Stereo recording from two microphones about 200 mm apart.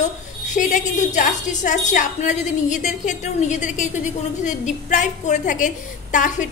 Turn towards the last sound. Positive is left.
turn(degrees=40)  # may be behind; listen again after turning